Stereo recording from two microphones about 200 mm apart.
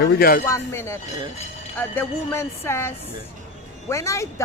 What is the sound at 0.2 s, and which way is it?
Speech, 45° left (ahead or behind).